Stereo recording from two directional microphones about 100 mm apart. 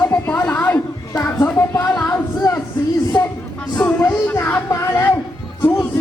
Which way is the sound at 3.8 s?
15° left (ahead or behind).